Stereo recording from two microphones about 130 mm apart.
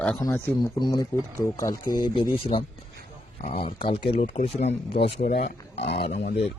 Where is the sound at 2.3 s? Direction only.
45° left (ahead or behind).